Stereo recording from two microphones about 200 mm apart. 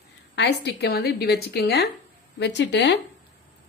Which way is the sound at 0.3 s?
55° left (ahead or behind).